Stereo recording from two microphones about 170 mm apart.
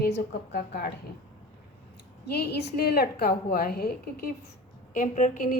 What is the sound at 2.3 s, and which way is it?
A woman's voice, 75° left (ahead or behind).